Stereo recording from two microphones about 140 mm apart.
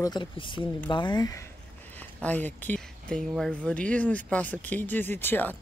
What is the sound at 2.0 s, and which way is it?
Speech, 10° left (ahead or behind).